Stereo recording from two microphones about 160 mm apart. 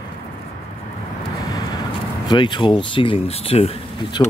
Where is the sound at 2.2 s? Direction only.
30° left (ahead or behind).